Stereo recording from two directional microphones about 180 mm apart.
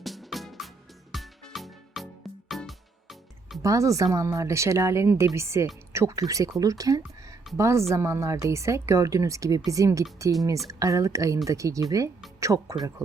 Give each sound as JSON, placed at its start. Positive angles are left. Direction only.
{"t": 0.0, "sound": "music", "side_deg": 0}
{"t": 3.6, "sound": "speech", "side_deg": -15}